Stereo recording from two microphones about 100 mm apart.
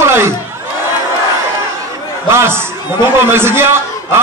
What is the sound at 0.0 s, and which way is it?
Crowd, 25° right (ahead or behind).